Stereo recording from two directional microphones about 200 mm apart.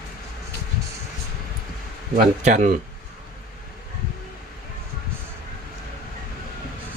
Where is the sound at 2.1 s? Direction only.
35° right (ahead or behind).